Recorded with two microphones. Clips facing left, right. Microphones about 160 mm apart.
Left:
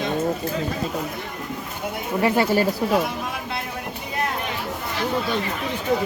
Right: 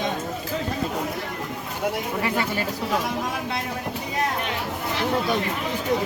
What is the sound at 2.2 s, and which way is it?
Speech, 30° left (ahead or behind).